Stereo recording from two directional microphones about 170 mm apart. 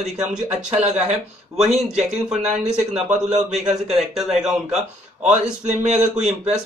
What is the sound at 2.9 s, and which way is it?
Speech, 40° right (ahead or behind).